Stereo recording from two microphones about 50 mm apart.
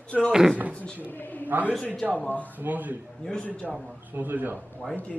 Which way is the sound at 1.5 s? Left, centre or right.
Right.